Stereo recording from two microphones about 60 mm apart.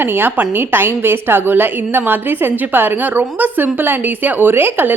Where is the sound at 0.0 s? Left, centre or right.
Right.